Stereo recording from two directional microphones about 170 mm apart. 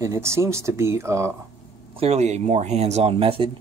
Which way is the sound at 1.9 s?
35° right (ahead or behind).